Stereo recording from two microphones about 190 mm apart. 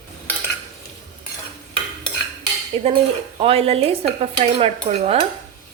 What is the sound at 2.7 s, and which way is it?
Dishes, 30° right (ahead or behind).